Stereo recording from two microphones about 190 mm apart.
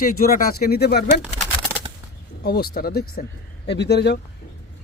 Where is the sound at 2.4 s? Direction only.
55° left (ahead or behind).